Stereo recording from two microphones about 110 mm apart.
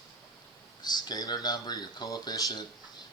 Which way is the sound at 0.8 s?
40° left (ahead or behind).